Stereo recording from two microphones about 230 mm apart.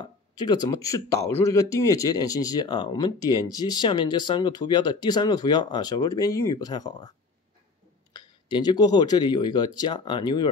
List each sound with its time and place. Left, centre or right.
0.0 s a man's voice: centre